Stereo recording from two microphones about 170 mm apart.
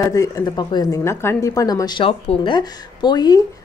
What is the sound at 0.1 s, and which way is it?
A woman's voice, 20° left (ahead or behind).